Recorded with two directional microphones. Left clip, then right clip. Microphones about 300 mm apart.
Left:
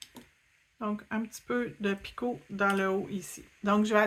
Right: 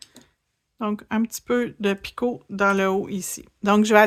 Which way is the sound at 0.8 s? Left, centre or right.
Right.